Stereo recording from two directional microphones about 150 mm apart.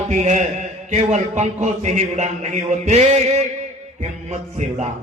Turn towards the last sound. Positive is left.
turn(degrees=-50)  # may be behind; listen again after turning